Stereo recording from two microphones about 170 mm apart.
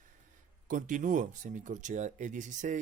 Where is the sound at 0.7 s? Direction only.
50° right (ahead or behind).